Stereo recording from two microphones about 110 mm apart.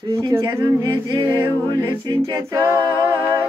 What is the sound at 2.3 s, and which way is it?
A capella, 30° right (ahead or behind).